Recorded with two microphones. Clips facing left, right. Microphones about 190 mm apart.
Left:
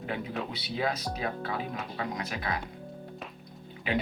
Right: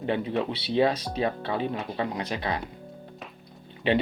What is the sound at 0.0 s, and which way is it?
Speech, 30° right (ahead or behind).